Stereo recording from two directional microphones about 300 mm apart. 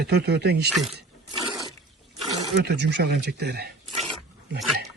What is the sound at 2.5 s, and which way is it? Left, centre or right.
Speech, right.